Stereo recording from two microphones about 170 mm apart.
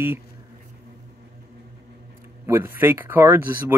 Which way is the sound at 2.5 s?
15° right (ahead or behind).